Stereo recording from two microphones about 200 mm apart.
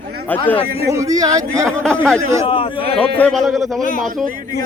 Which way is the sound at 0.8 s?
15° right (ahead or behind).